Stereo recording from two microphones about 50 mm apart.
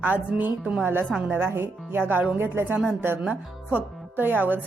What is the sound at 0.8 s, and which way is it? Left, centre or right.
A woman's voice, right.